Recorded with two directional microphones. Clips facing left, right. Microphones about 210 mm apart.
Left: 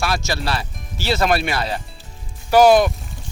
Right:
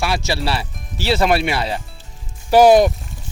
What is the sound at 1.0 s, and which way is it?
Speech, 30° right (ahead or behind).